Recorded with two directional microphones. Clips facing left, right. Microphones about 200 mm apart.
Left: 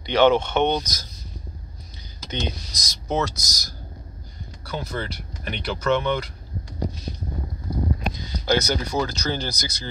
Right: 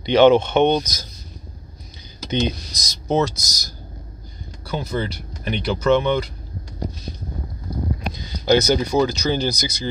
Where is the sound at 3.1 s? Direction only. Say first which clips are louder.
Right 5 dB; 30° right (ahead or behind).